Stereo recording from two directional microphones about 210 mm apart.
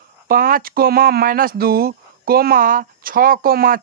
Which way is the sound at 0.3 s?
45° right (ahead or behind).